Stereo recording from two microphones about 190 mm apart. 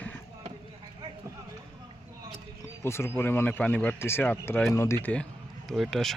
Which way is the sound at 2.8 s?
15° left (ahead or behind).